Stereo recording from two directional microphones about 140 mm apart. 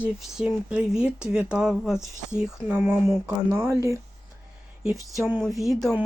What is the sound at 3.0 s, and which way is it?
Speech, 20° right (ahead or behind).